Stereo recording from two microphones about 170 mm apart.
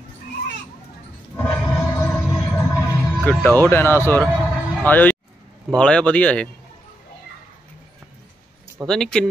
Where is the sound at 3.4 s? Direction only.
10° left (ahead or behind).